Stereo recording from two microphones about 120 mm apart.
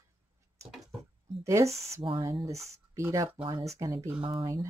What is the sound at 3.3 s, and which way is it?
Speech, 45° right (ahead or behind).